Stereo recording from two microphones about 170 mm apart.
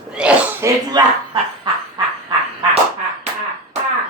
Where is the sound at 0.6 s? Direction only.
20° right (ahead or behind).